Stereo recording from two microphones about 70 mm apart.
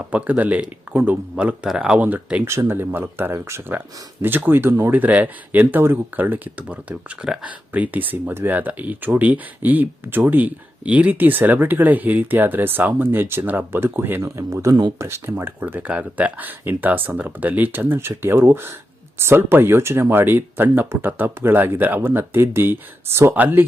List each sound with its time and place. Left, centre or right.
0.0 s speech: centre
1.6 s speech: centre
2.0 s speech: right
2.4 s speech: right
4.9 s speech: right
14.3 s speech: right